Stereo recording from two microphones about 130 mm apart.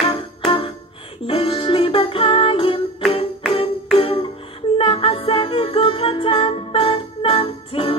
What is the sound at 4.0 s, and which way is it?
Music, 45° left (ahead or behind).